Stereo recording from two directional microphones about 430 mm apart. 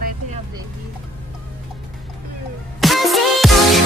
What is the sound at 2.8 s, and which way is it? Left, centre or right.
Music, centre.